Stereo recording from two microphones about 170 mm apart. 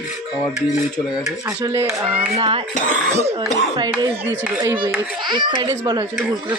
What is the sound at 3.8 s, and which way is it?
Speech, 25° right (ahead or behind).